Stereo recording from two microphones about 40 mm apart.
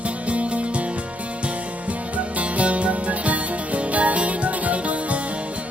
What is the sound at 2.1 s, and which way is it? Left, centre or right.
Music, right.